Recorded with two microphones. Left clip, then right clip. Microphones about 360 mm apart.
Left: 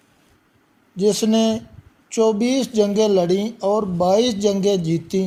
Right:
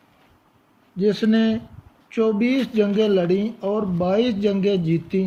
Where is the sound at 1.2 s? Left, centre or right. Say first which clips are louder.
Left 2 dB; centre.